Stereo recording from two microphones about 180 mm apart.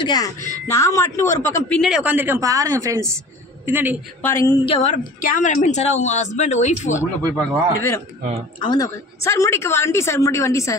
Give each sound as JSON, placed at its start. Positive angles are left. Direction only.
{"t": 0.0, "sound": "a woman's voice", "side_deg": 20}
{"t": 1.8, "sound": "a woman's voice", "side_deg": -5}
{"t": 4.2, "sound": "a woman's voice", "side_deg": 15}
{"t": 4.6, "sound": "a woman's voice", "side_deg": 35}
{"t": 7.3, "sound": "a woman's voice", "side_deg": 15}
{"t": 8.2, "sound": "speech", "side_deg": -40}
{"t": 8.5, "sound": "a woman's voice", "side_deg": 20}